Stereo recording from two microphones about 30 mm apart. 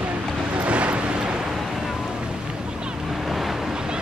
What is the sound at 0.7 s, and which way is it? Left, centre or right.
Vehicle, right.